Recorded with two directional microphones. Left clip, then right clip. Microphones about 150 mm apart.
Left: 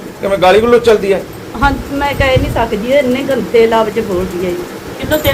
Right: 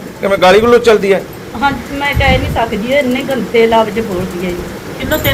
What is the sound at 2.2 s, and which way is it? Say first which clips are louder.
A woman's voice: right 1 dB; 30° left (ahead or behind).